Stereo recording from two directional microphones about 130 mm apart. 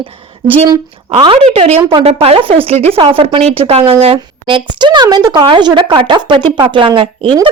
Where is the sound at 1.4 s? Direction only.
55° right (ahead or behind).